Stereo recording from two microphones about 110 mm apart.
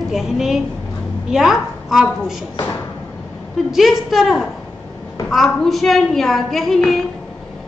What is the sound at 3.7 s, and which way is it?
A woman's voice, centre (ahead or behind).